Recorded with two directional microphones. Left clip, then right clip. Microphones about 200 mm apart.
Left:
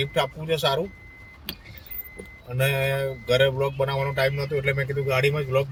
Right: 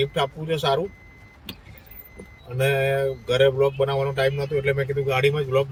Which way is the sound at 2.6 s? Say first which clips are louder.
Right 3 dB; 20° left (ahead or behind).